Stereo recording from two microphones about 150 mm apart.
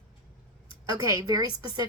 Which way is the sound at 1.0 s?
25° right (ahead or behind).